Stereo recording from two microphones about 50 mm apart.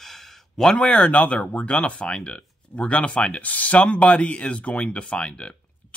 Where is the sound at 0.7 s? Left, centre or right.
Left.